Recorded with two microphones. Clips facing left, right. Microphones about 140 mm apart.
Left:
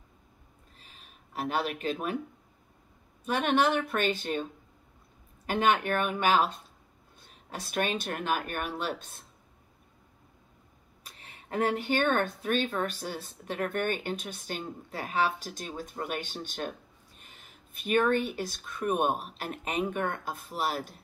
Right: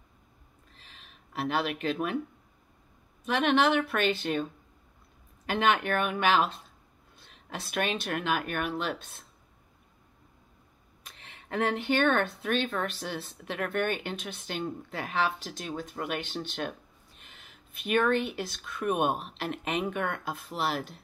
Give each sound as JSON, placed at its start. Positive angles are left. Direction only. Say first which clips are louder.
{"t": 0.9, "sound": "speech", "louder": "right 1 dB", "side_deg": 40}
{"t": 3.3, "sound": "speech", "louder": "right 1 dB", "side_deg": 40}
{"t": 5.5, "sound": "speech", "louder": "even", "side_deg": 40}
{"t": 11.1, "sound": "a sound", "louder": "even", "side_deg": 40}
{"t": 11.4, "sound": "speech", "louder": "even", "side_deg": 40}